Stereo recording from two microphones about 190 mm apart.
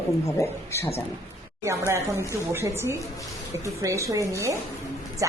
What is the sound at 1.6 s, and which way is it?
A woman's voice, 15° right (ahead or behind).